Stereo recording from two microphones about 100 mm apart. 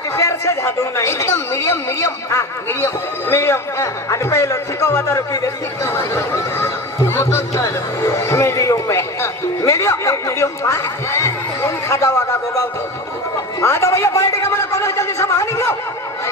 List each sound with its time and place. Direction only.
0.1 s speech: 30° left (ahead or behind)
5.9 s snicker: 25° left (ahead or behind)
13.6 s a sound: 30° left (ahead or behind)